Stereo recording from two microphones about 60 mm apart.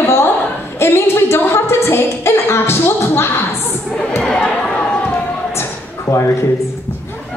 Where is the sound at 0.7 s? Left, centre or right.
Left.